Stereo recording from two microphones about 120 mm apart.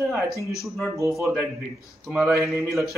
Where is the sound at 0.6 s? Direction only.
Centre (ahead or behind).